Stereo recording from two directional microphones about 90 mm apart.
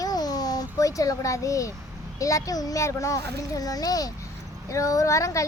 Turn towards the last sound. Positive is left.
turn(degrees=35)  # may be behind; listen again after turning